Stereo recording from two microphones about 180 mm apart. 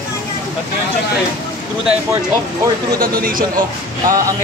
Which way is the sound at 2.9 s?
50° right (ahead or behind).